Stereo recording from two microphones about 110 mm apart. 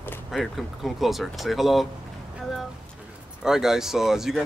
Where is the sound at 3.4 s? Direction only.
5° right (ahead or behind).